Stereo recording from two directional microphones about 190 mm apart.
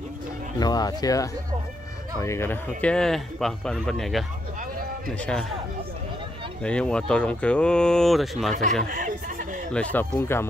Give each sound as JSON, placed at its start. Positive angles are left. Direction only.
{"t": 0.6, "sound": "speech", "side_deg": 20}
{"t": 5.2, "sound": "speech", "side_deg": 5}
{"t": 6.6, "sound": "speech", "side_deg": 5}
{"t": 8.8, "sound": "a sound", "side_deg": -45}
{"t": 9.7, "sound": "speech", "side_deg": 5}